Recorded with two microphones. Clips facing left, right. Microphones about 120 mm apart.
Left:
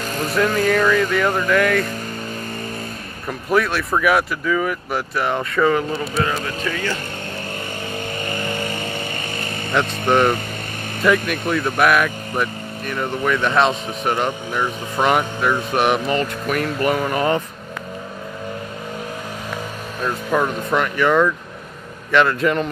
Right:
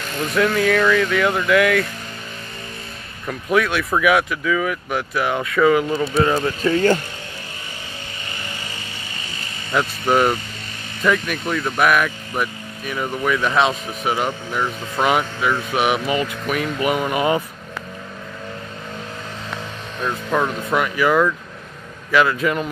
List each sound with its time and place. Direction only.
0.7 s speech: 5° left (ahead or behind)
3.3 s speech: centre (ahead or behind)
6.2 s speech: 30° right (ahead or behind)
8.3 s vehicle: 50° left (ahead or behind)
9.8 s speech: 5° right (ahead or behind)
20.0 s speech: 5° left (ahead or behind)